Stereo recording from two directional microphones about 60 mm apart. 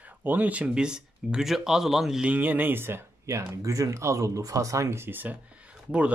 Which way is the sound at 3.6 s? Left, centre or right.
Right.